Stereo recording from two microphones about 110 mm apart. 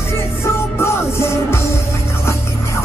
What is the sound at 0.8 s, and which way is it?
Music, 25° left (ahead or behind).